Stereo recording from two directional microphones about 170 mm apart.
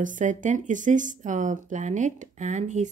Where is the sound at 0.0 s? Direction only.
50° right (ahead or behind).